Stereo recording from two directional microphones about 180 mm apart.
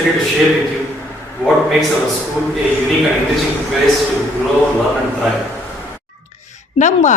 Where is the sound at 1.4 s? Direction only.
Centre (ahead or behind).